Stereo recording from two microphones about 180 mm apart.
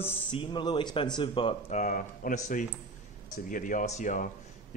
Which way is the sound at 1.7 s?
45° left (ahead or behind).